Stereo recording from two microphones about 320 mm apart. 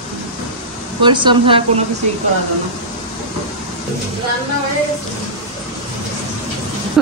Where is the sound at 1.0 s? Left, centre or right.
Centre.